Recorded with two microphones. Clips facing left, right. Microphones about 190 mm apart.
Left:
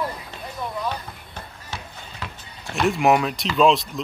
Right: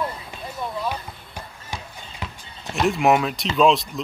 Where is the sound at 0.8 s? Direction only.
15° right (ahead or behind).